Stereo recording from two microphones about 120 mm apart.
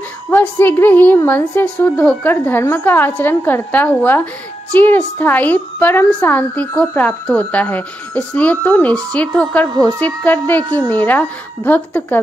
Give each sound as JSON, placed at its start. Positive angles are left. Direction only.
{"t": 0.3, "sound": "a woman's voice", "side_deg": 15}
{"t": 9.7, "sound": "speech", "side_deg": -35}
{"t": 9.9, "sound": "a woman's voice", "side_deg": 15}